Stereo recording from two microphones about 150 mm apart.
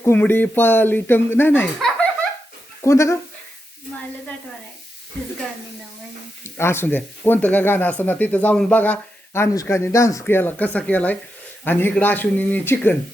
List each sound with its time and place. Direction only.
0.0 s speech: 15° left (ahead or behind)
2.8 s speech: 20° left (ahead or behind)
6.4 s speech: 15° left (ahead or behind)